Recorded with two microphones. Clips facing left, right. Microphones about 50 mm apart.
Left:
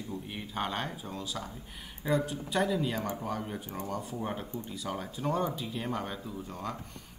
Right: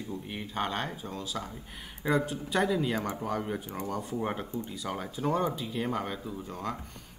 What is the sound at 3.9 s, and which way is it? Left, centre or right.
Speech, centre.